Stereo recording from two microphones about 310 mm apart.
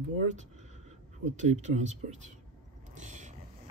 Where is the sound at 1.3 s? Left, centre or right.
Right.